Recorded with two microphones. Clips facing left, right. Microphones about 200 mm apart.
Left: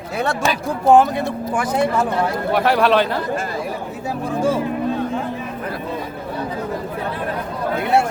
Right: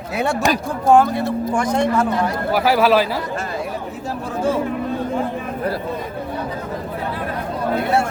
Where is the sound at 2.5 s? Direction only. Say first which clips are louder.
Right 1 dB; 5° right (ahead or behind).